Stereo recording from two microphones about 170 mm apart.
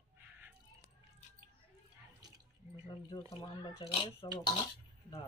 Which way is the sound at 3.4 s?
25° left (ahead or behind).